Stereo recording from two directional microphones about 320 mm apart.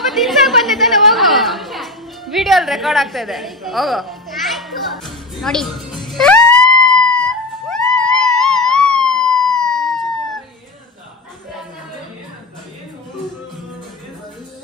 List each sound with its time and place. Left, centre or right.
0.1 s a sound: centre
8.4 s music: centre
8.9 s emergency vehicle: centre
9.5 s police car: centre